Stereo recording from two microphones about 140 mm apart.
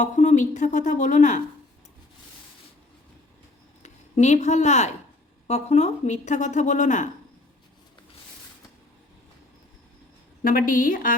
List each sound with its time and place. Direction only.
0.0 s speech: 60° left (ahead or behind)
3.8 s a woman's voice: 55° left (ahead or behind)
10.4 s a woman's voice: 85° left